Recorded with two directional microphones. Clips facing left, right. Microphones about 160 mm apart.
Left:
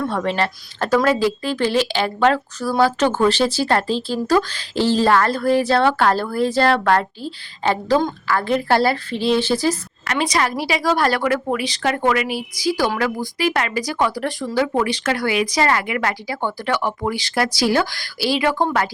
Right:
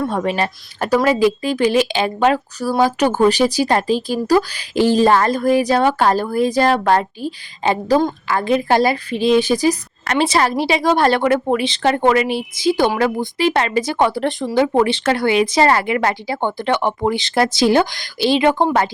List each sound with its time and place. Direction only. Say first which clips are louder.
0.0 s speech: right 2 dB; 15° right (ahead or behind)
10.1 s a woman's voice: right 4 dB; 30° right (ahead or behind)